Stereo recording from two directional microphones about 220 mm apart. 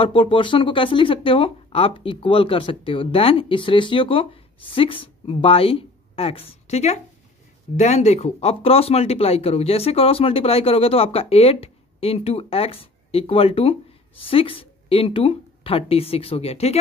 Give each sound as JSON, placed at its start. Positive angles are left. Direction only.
{"t": 0.0, "sound": "speech", "side_deg": 25}